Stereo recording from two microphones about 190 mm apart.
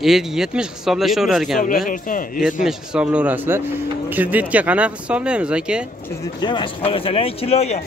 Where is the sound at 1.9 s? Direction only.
45° left (ahead or behind).